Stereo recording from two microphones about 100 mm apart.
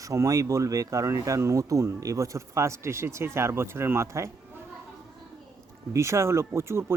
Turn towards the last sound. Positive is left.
turn(degrees=-25)  # may be behind; listen again after turning